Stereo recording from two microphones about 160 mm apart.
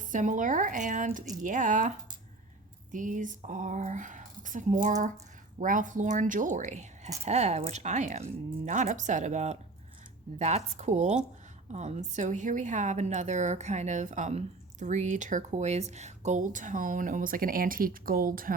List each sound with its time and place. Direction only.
0.0 s a woman's voice: 55° right (ahead or behind)